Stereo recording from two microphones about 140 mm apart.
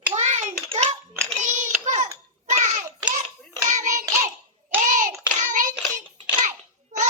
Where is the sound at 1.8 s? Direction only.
60° right (ahead or behind).